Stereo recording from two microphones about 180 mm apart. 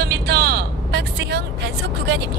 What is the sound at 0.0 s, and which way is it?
Vehicle, 65° right (ahead or behind).